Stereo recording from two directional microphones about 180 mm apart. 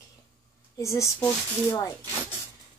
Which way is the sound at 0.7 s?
15° left (ahead or behind).